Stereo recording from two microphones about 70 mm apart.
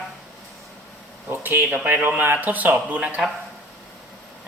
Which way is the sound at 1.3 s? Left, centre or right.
Right.